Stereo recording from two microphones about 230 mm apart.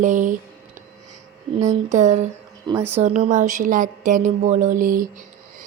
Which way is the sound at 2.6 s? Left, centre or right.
Centre.